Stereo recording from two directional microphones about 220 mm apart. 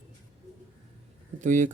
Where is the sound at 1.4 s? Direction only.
35° right (ahead or behind).